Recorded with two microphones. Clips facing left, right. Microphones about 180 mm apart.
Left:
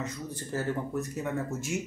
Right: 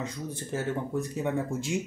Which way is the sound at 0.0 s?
25° right (ahead or behind).